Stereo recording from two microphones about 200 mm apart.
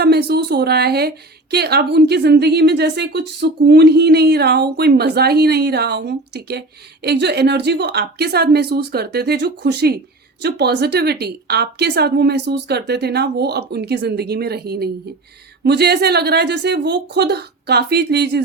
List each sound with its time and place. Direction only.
0.0 s speech: 55° right (ahead or behind)